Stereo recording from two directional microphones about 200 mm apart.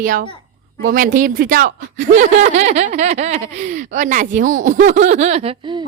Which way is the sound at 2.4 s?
35° right (ahead or behind).